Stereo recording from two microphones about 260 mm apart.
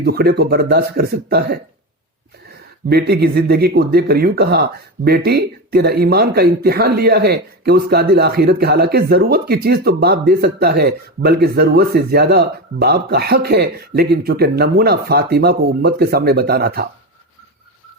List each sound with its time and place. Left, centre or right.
0.0 s speech: right
2.9 s speech: right